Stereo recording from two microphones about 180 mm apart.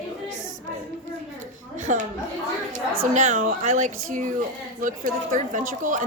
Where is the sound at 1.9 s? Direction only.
45° right (ahead or behind).